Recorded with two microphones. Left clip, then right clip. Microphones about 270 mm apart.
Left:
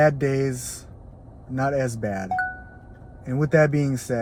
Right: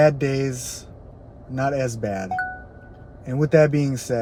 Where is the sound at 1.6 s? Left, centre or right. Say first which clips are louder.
Right 1 dB; right.